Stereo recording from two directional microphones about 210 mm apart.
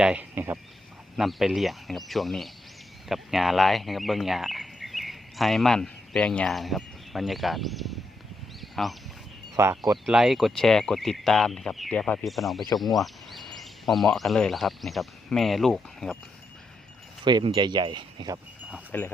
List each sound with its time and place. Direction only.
0.0 s speech: 5° right (ahead or behind)
9.6 s speech: 15° right (ahead or behind)
10.1 s speech: centre (ahead or behind)
17.2 s speech: 20° right (ahead or behind)
18.9 s speech: 10° left (ahead or behind)